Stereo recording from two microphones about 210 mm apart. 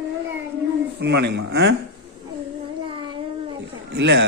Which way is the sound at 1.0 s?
55° right (ahead or behind).